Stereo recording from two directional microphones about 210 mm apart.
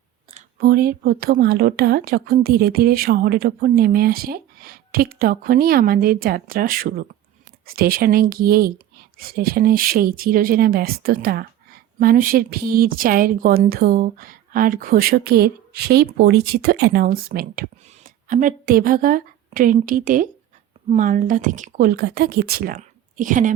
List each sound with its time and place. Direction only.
0.3 s a woman's voice: 45° right (ahead or behind)